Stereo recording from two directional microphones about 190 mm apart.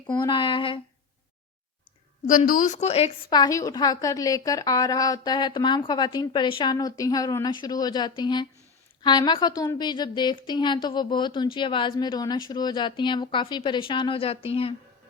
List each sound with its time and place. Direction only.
0.1 s a woman's voice: 25° left (ahead or behind)
2.2 s a woman's voice: 40° left (ahead or behind)